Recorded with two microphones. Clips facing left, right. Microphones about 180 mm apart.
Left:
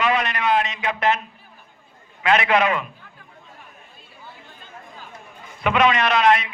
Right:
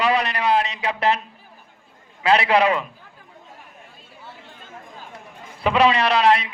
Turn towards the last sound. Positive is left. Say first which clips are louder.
# even
turn(degrees=-35)  # may be behind; listen again after turning